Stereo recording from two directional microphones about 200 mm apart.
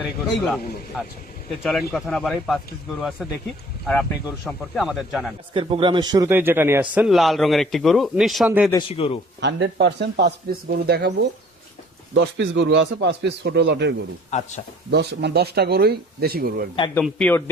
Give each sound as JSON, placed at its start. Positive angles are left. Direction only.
{"t": 0.0, "sound": "a man's voice", "side_deg": 0}
{"t": 4.4, "sound": "a man's voice", "side_deg": 0}
{"t": 5.5, "sound": "a man's voice", "side_deg": -25}
{"t": 8.9, "sound": "speech", "side_deg": 30}
{"t": 9.4, "sound": "speech", "side_deg": -60}
{"t": 12.1, "sound": "speech", "side_deg": -65}
{"t": 14.3, "sound": "speech", "side_deg": 35}
{"t": 14.8, "sound": "speech", "side_deg": -55}
{"t": 16.9, "sound": "a man's voice", "side_deg": 5}